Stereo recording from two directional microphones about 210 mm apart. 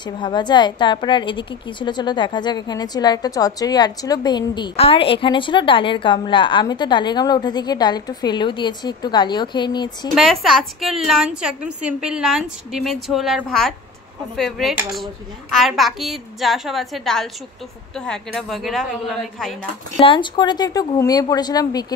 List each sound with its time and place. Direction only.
0.0 s a woman's voice: 20° left (ahead or behind)
10.1 s a woman's voice: centre (ahead or behind)
20.0 s a woman's voice: 25° left (ahead or behind)